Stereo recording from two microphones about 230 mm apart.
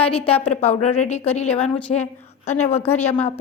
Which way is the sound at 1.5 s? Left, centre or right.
Centre.